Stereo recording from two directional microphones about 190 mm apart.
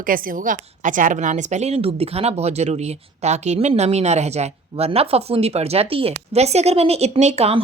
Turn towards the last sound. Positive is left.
turn(degrees=-35)  # may be behind; listen again after turning